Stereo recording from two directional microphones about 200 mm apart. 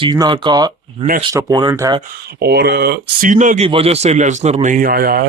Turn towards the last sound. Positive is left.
turn(degrees=-45)  # may be behind; listen again after turning